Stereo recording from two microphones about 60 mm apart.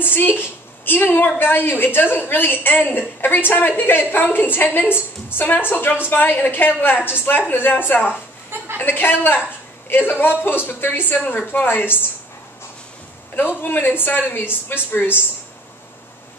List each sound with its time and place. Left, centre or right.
0.0 s a woman's voice: left
11.6 s a woman's voice: left
13.4 s a woman's voice: left